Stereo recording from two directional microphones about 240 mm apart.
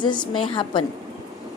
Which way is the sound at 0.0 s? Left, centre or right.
Centre.